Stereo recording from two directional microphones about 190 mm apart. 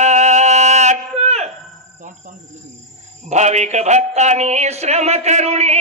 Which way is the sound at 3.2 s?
35° right (ahead or behind).